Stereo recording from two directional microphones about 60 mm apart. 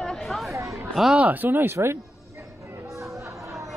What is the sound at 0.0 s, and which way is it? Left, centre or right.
Chatter, centre.